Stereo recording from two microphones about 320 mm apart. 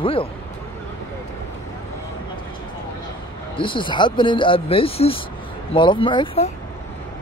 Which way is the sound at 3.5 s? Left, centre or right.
Centre.